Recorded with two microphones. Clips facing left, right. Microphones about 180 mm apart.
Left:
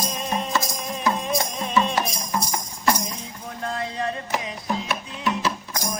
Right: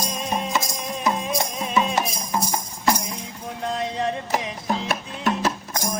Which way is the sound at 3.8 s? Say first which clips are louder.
Right 3 dB; 20° right (ahead or behind).